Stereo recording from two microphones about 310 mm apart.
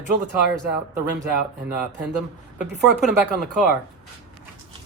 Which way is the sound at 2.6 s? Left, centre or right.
Centre.